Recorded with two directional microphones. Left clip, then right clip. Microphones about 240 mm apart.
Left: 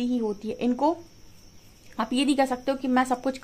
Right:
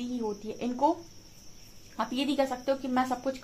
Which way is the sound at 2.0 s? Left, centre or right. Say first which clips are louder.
Left 5 dB; left.